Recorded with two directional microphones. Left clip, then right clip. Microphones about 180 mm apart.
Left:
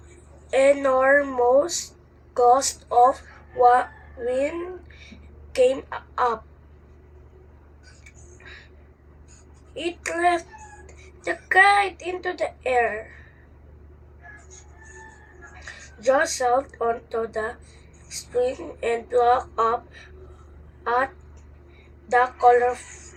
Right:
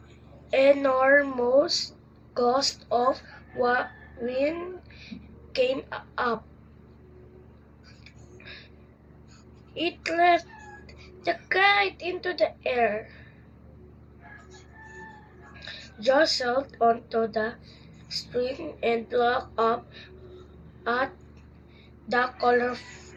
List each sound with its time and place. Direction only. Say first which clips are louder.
0.5 s a woman's voice: left 2 dB; 20° left (ahead or behind)
5.5 s a woman's voice: left 6 dB; 15° left (ahead or behind)
9.7 s a woman's voice: right 2 dB; 20° left (ahead or behind)
15.5 s a woman's voice: right 1 dB; 20° left (ahead or behind)
22.1 s speech: left 6 dB; 20° left (ahead or behind)